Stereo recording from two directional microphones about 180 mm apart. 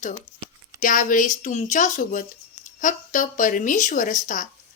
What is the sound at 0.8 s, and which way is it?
A woman's voice, 50° left (ahead or behind).